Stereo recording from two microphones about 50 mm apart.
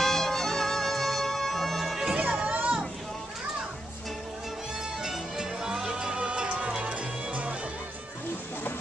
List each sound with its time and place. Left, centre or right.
0.0 s music: centre
2.1 s music: right
5.0 s music: centre; by 7.5 s right